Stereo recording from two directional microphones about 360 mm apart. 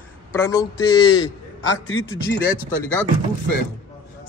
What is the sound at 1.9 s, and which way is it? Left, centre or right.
Speech, left.